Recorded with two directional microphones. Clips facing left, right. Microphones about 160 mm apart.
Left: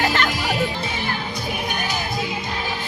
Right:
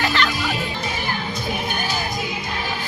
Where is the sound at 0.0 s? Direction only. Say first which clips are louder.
Even; 45° left (ahead or behind).